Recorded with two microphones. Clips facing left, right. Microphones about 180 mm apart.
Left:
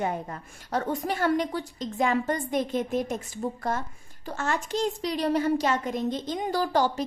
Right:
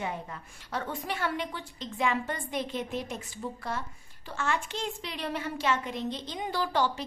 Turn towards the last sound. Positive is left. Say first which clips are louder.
# left 4 dB
turn(degrees=45)  # may be behind; listen again after turning